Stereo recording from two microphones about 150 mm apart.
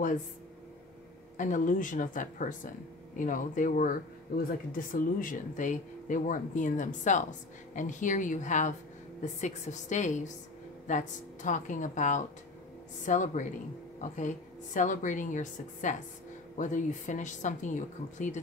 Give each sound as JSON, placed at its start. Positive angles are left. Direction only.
{"t": 1.3, "sound": "a woman's voice", "side_deg": 60}